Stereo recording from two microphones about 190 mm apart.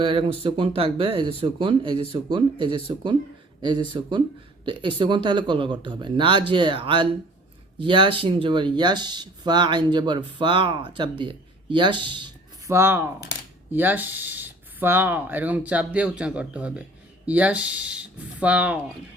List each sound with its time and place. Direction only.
0.0 s speech: 30° right (ahead or behind); by 18.8 s 10° right (ahead or behind)